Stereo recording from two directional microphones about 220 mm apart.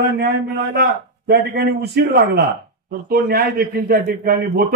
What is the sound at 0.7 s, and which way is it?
A man's voice, 45° right (ahead or behind).